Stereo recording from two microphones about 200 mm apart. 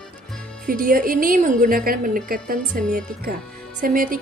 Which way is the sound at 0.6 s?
45° right (ahead or behind).